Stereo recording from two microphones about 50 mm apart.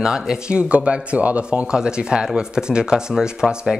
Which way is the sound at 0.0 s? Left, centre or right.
Centre.